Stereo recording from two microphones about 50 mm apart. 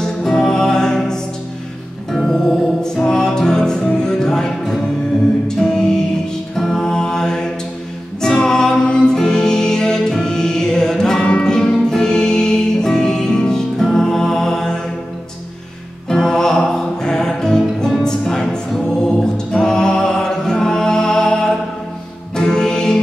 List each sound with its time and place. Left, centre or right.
0.0 s music: centre
6.5 s mantra: centre
8.2 s music: centre
16.1 s music: centre
18.0 s a capella: centre
22.3 s music: centre